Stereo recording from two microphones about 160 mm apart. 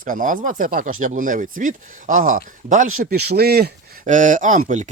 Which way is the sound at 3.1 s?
90° right.